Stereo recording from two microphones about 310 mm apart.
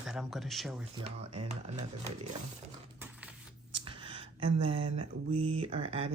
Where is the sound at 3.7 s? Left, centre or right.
Centre.